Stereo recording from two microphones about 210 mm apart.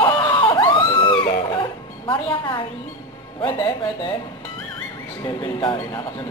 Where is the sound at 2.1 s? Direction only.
25° left (ahead or behind).